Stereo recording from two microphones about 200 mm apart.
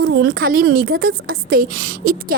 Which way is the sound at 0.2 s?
50° right (ahead or behind).